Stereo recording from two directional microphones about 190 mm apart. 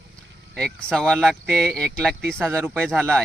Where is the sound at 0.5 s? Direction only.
5° left (ahead or behind).